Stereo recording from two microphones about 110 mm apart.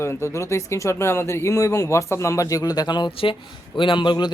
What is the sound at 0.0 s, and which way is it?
A man's voice, 25° left (ahead or behind).